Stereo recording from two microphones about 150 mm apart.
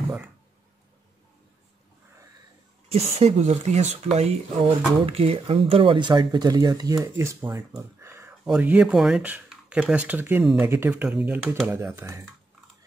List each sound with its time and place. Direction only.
2.9 s speech: 45° right (ahead or behind); by 7.0 s 25° right (ahead or behind)
7.5 s a sound: 20° right (ahead or behind)
8.5 s speech: 10° right (ahead or behind)